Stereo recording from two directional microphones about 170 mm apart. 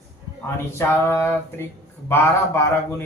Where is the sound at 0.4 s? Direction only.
15° left (ahead or behind).